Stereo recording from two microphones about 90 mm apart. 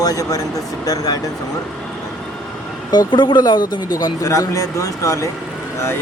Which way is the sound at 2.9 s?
55° left (ahead or behind).